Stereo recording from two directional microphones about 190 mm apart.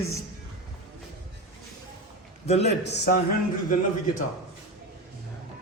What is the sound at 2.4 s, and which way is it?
Speech, 35° left (ahead or behind).